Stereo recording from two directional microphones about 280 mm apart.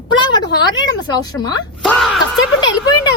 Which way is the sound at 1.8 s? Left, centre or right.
Centre.